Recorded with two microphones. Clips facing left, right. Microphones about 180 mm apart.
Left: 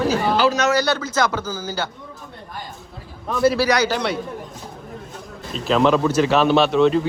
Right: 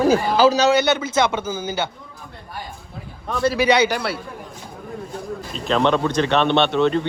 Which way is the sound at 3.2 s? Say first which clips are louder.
Left 1 dB; centre (ahead or behind).